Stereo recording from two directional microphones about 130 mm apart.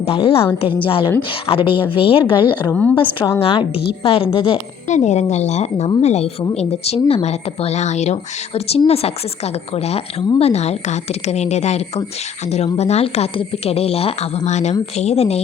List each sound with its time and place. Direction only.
0.0 s a woman's voice: 45° left (ahead or behind)
2.6 s a woman's voice: 10° left (ahead or behind)
2.9 s a woman's voice: 40° left (ahead or behind)
4.9 s speech: 65° left (ahead or behind)